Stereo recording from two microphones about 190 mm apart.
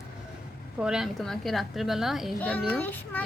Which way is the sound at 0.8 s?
5° right (ahead or behind).